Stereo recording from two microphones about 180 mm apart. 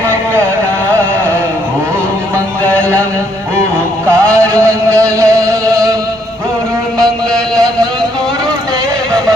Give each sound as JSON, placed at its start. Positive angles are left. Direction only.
{"t": 4.1, "sound": "music", "side_deg": -15}